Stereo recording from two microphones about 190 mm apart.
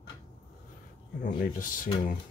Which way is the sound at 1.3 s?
50° left (ahead or behind).